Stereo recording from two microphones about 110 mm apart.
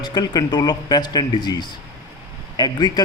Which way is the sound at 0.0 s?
40° left (ahead or behind).